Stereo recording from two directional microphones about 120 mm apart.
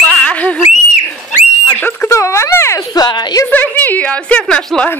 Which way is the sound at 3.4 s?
15° left (ahead or behind).